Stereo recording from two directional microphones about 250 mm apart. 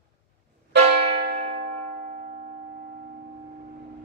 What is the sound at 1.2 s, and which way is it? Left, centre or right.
Church bell, right.